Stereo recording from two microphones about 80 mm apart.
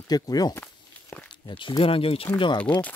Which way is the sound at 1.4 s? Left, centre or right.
Left.